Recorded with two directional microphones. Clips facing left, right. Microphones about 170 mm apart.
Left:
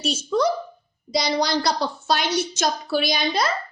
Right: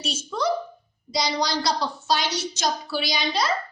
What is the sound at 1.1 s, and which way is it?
A woman's voice, 55° left (ahead or behind).